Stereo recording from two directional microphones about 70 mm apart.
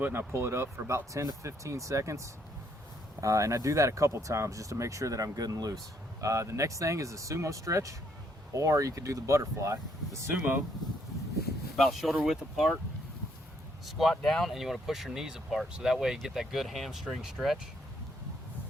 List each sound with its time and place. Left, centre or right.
0.0 s speech: right
6.2 s speech: right
11.8 s speech: centre
13.8 s speech: centre